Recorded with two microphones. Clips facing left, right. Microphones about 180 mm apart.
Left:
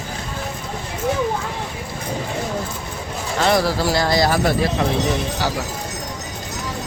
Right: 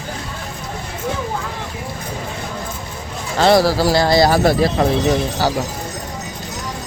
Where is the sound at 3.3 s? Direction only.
35° right (ahead or behind).